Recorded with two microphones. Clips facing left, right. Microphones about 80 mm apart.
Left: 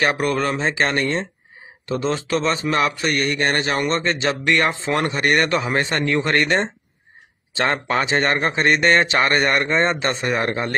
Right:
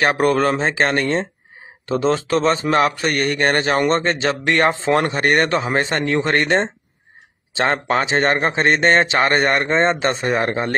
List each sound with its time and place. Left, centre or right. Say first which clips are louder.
0.0 s speech: right 4 dB; right